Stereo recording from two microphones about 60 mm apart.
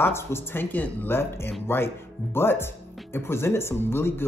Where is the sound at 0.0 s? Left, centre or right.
Left.